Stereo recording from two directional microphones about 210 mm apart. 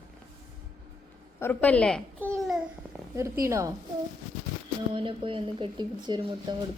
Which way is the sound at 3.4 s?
15° right (ahead or behind).